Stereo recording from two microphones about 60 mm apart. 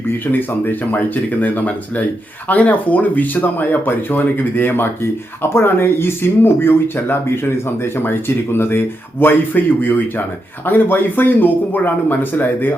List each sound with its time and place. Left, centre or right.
0.3 s speech: left